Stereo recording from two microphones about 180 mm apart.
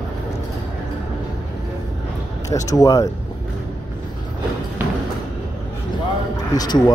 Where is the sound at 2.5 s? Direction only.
20° left (ahead or behind).